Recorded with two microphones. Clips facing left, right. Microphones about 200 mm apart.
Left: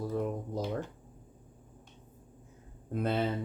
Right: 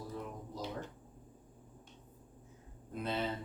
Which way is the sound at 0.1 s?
55° left (ahead or behind).